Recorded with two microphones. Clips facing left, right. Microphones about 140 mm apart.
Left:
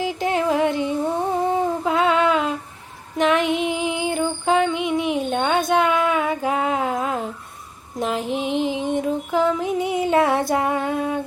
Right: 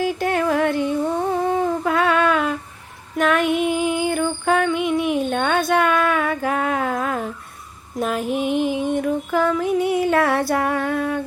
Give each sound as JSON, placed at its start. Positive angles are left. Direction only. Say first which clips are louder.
{"t": 0.0, "sound": "humming", "louder": "right 1 dB", "side_deg": 20}
{"t": 3.2, "sound": "music", "louder": "right 1 dB", "side_deg": 20}
{"t": 7.9, "sound": "a sound", "louder": "right 1 dB", "side_deg": 20}
{"t": 8.4, "sound": "music", "louder": "right 2 dB", "side_deg": -15}
{"t": 8.9, "sound": "female singing", "louder": "right 1 dB", "side_deg": 20}